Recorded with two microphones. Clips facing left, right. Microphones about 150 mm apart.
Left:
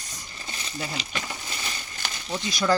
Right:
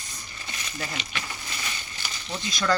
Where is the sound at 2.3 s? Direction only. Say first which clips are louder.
Left 2 dB; 10° left (ahead or behind).